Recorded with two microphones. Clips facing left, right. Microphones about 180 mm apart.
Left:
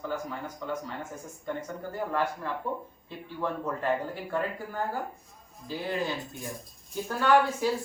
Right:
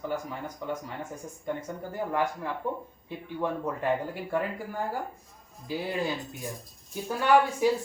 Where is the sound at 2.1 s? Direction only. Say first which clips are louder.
Right 1 dB; 15° right (ahead or behind).